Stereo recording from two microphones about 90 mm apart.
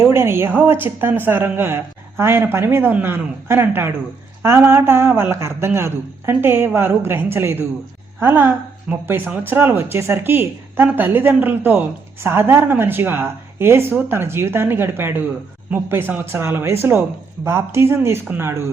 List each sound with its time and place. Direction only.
0.0 s speech: 25° right (ahead or behind)